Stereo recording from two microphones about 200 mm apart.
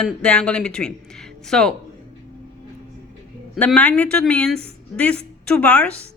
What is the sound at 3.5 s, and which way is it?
A woman's voice, 5° left (ahead or behind).